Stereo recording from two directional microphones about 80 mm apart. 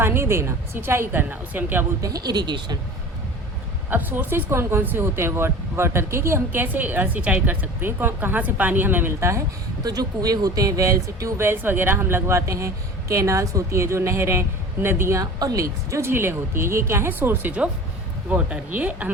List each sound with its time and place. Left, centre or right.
0.0 s speech: right
2.0 s speech: right
3.8 s speech: right
9.8 s speech: right
11.4 s speech: right
15.2 s speech: right; by 19.1 s centre